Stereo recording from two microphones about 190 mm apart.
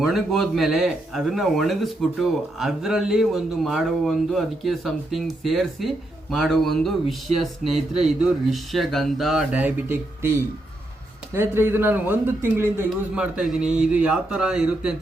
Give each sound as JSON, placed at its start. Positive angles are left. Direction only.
{"t": 0.0, "sound": "speech", "side_deg": 0}
{"t": 7.3, "sound": "speech", "side_deg": -35}
{"t": 8.0, "sound": "speech", "side_deg": 0}